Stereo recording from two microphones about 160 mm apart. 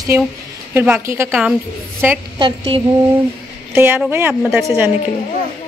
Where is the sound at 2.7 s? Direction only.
35° right (ahead or behind).